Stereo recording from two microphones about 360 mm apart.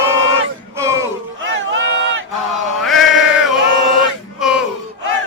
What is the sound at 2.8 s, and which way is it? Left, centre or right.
Chant, centre.